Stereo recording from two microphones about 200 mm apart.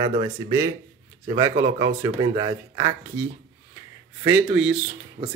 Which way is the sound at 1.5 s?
35° right (ahead or behind).